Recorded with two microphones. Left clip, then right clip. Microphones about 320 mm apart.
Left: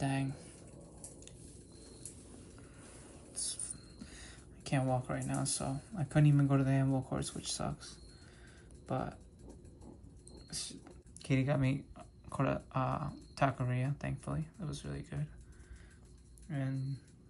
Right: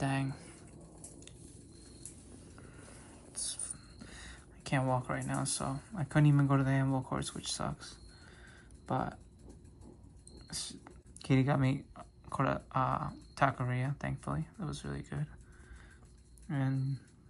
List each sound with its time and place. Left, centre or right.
0.0 s a sound: centre
3.3 s speech: centre
10.5 s speech: centre
16.4 s speech: centre